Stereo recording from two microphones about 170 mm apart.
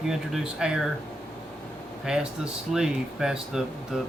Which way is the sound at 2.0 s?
5° right (ahead or behind).